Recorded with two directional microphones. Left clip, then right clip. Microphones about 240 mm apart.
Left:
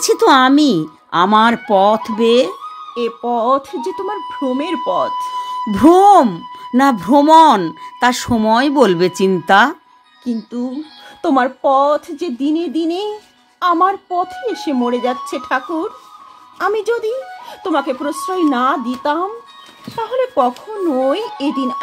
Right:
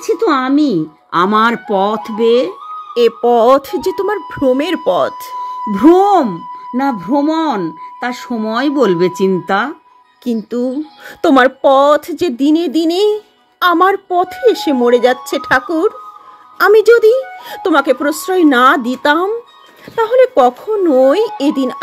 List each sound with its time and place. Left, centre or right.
0.0 s speech: left
1.1 s speech: centre
2.9 s a woman's voice: right
5.7 s speech: centre
10.6 s a woman's voice: right